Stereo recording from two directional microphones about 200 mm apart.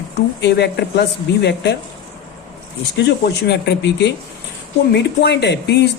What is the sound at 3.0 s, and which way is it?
Speech, 55° left (ahead or behind).